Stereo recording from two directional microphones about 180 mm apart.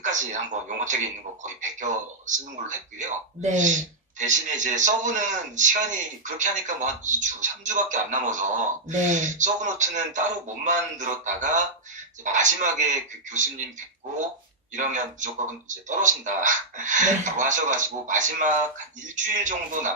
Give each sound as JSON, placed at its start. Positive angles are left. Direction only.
{"t": 0.0, "sound": "a sound", "side_deg": -45}
{"t": 1.4, "sound": "speech", "side_deg": -45}
{"t": 14.7, "sound": "speech", "side_deg": -45}